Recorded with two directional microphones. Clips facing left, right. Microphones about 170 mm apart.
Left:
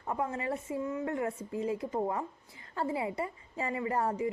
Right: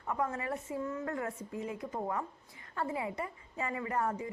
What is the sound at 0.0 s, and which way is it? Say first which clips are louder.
A woman's voice: left 1 dB; 25° left (ahead or behind).